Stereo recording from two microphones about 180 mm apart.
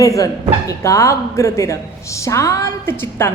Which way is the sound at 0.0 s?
20° left (ahead or behind).